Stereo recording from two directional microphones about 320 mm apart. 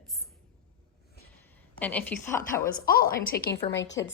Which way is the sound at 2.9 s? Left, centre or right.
Left.